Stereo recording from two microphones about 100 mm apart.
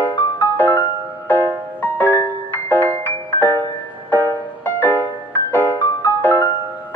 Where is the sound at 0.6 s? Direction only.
20° left (ahead or behind).